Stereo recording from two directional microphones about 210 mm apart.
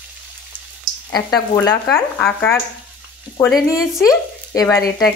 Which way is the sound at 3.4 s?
20° left (ahead or behind).